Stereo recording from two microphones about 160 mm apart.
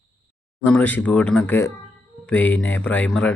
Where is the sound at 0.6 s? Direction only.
10° left (ahead or behind).